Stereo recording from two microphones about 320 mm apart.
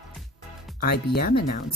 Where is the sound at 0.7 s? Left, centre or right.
Left.